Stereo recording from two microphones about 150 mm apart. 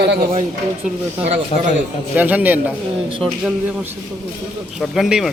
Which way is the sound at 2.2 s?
10° right (ahead or behind).